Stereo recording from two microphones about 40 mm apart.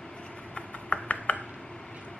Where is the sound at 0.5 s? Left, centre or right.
Left.